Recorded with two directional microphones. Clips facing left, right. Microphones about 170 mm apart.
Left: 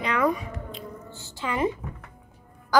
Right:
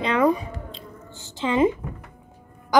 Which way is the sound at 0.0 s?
30° right (ahead or behind).